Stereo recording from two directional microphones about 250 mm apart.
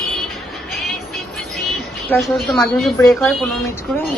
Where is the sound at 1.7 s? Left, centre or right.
Centre.